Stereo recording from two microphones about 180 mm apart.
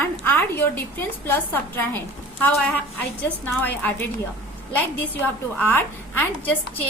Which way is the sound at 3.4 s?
10° left (ahead or behind).